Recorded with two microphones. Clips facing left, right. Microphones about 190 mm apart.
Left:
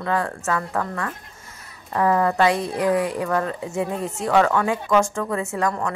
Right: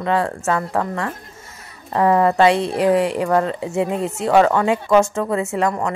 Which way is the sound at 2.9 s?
75° right (ahead or behind).